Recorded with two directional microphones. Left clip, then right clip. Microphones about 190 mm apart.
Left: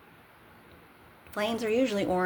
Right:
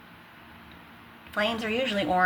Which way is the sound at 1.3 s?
75° left (ahead or behind).